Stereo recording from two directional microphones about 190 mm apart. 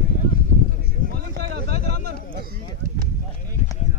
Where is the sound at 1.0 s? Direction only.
55° right (ahead or behind).